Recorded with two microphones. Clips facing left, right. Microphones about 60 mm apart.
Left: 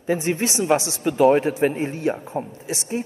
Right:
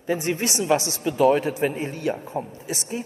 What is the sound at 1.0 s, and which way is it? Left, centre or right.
Speech, left.